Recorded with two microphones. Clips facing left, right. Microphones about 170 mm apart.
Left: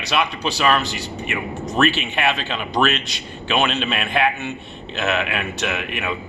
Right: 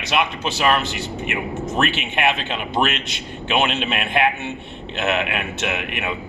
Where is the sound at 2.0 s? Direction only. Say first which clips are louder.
Right 1 dB; 20° right (ahead or behind).